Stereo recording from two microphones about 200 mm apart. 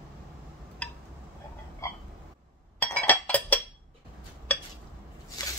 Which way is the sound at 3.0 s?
5° left (ahead or behind).